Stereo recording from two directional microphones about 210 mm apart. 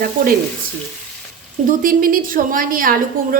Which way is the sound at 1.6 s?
40° right (ahead or behind).